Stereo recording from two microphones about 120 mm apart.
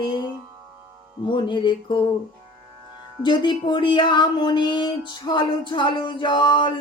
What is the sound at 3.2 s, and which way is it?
Speech, 40° left (ahead or behind).